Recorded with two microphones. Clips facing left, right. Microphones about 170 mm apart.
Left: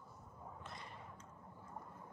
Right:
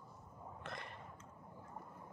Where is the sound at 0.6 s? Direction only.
70° right (ahead or behind).